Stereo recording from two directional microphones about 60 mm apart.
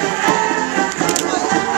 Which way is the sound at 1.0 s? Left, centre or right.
Centre.